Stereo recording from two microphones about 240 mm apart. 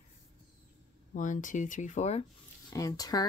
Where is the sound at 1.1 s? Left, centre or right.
Left.